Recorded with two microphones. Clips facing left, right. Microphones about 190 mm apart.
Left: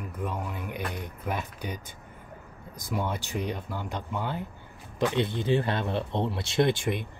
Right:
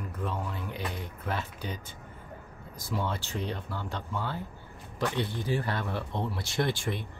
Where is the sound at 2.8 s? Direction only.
15° left (ahead or behind).